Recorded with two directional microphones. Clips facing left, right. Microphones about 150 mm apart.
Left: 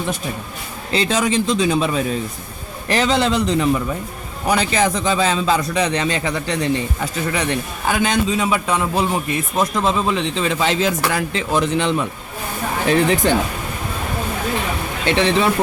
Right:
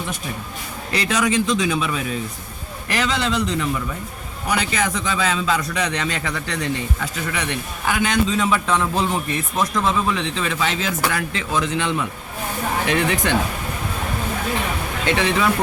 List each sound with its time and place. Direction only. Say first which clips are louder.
0.9 s speech: left 2 dB; 30° left (ahead or behind)
7.0 s speech: left 4 dB; 35° left (ahead or behind)
8.3 s a man's voice: left 1 dB; 15° left (ahead or behind)
9.6 s speech: left 2 dB; 25° left (ahead or behind)
15.0 s speech: left 3 dB; 30° left (ahead or behind)